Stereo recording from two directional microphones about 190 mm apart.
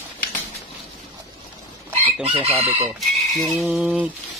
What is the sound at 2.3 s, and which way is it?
Chicken, 30° right (ahead or behind).